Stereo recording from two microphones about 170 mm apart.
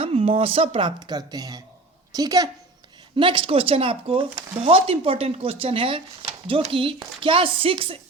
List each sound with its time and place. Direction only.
0.0 s a woman's voice: 35° right (ahead or behind)